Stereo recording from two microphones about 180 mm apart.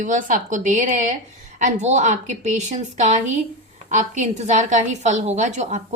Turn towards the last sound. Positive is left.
turn(degrees=-40)  # may be behind; listen again after turning